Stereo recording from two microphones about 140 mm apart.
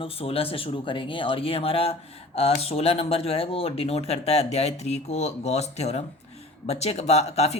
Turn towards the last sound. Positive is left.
turn(degrees=50)  # may be behind; listen again after turning